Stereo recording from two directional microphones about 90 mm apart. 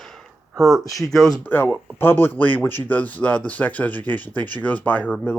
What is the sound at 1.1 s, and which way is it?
Speech, centre (ahead or behind).